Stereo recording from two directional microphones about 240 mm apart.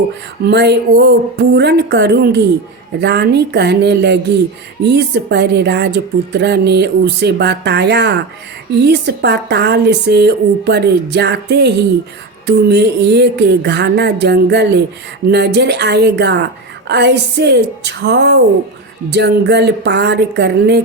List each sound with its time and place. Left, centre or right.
0.4 s speech: right